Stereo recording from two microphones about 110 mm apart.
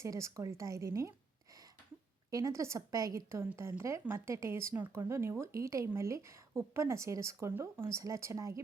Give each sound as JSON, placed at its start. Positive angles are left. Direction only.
{"t": 0.0, "sound": "speech", "side_deg": -30}
{"t": 2.3, "sound": "speech", "side_deg": -30}